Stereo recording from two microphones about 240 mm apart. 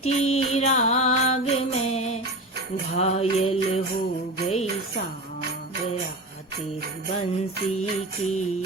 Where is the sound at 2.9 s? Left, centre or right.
Left.